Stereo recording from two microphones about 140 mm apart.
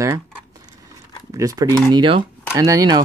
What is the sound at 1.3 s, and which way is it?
Speech, 25° right (ahead or behind).